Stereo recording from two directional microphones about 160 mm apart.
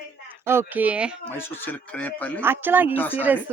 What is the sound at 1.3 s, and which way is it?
Speech, 15° left (ahead or behind).